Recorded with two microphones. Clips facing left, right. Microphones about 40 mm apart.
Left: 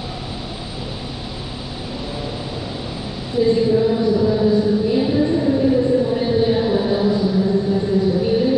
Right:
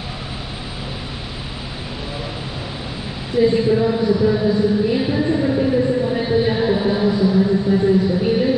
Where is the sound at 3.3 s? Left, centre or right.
Right.